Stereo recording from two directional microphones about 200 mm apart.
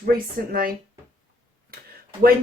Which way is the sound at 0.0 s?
45° right (ahead or behind).